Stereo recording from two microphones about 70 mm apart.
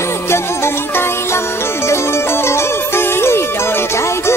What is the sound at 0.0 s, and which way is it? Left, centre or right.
Music, left.